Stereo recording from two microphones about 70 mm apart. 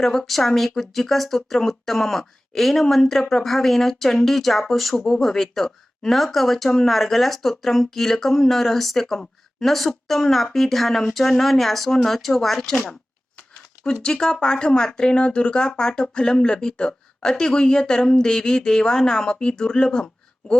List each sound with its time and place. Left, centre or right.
0.0 s speech: centre
13.8 s speech: centre